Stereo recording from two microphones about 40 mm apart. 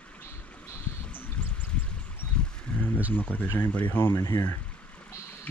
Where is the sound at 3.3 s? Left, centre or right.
Left.